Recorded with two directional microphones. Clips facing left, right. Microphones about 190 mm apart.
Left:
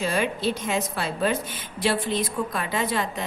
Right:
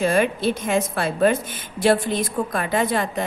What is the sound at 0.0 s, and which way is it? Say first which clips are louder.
A woman's voice: right 5 dB; 55° right (ahead or behind).